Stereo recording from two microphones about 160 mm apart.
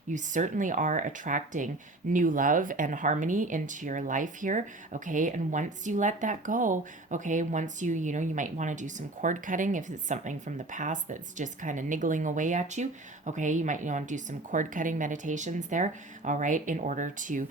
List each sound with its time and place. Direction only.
0.1 s speech: 50° right (ahead or behind)